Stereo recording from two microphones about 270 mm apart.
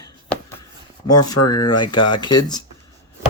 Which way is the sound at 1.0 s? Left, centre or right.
Left.